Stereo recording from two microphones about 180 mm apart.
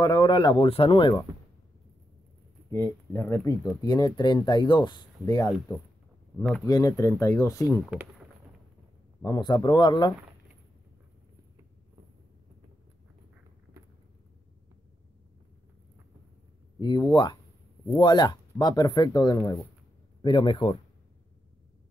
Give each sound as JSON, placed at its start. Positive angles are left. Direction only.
{"t": 0.0, "sound": "speech", "side_deg": 25}
{"t": 2.7, "sound": "speech", "side_deg": 15}
{"t": 9.2, "sound": "speech", "side_deg": 25}
{"t": 16.8, "sound": "speech", "side_deg": 25}